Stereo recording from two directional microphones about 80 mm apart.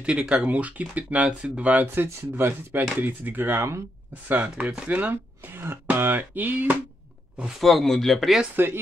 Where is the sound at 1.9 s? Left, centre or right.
Right.